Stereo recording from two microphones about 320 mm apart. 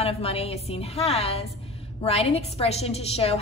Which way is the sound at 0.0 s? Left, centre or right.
Centre.